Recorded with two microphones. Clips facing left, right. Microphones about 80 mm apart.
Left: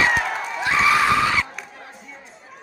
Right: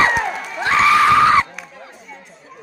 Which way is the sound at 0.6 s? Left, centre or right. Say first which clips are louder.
Right 5 dB; right.